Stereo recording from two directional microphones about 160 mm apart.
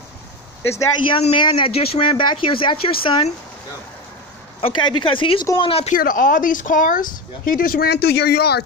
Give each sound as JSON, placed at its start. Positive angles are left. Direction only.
{"t": 1.2, "sound": "speech", "side_deg": 30}
{"t": 4.6, "sound": "speech", "side_deg": 35}
{"t": 5.9, "sound": "speech", "side_deg": 60}